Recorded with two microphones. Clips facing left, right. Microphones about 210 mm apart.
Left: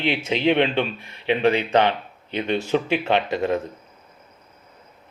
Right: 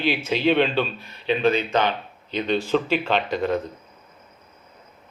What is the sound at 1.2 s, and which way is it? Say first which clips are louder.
Speech: left 1 dB; 70° left (ahead or behind).